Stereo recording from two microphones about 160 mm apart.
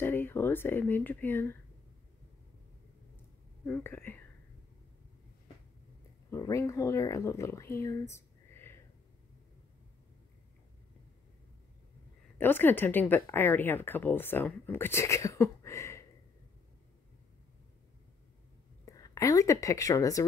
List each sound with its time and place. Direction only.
0.0 s speech: 15° left (ahead or behind)
3.6 s speech: 10° left (ahead or behind)
6.3 s speech: 20° left (ahead or behind)
12.4 s speech: 15° left (ahead or behind)
18.9 s speech: 20° left (ahead or behind)